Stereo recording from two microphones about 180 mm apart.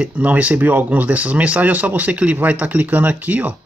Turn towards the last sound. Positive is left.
turn(degrees=-10)  # may be behind; listen again after turning